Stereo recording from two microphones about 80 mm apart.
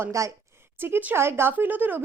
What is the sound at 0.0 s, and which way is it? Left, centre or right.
Speech, right.